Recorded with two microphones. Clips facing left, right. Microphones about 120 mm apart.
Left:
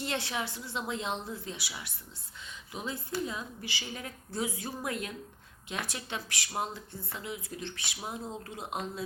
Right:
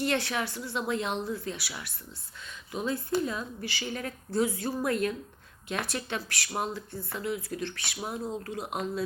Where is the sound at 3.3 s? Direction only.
15° left (ahead or behind).